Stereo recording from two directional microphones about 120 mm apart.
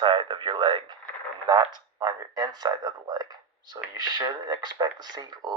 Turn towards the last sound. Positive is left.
turn(degrees=-35)  # may be behind; listen again after turning